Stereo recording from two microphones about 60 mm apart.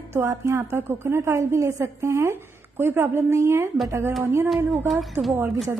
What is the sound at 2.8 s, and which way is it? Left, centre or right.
Speech, right.